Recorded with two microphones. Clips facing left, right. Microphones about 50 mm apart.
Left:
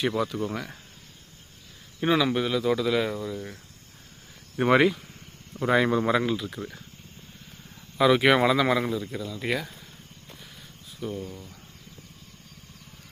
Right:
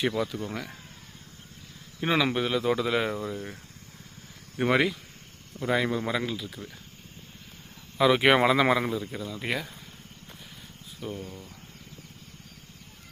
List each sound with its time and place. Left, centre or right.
0.4 s speech: centre
2.0 s speech: centre
4.5 s speech: centre
7.9 s speech: centre
8.2 s speech: centre
11.0 s speech: centre